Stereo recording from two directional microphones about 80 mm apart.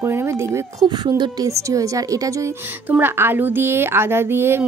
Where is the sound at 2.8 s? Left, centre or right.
Right.